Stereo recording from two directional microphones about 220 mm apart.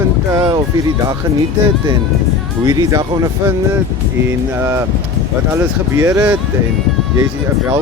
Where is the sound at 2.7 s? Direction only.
15° right (ahead or behind).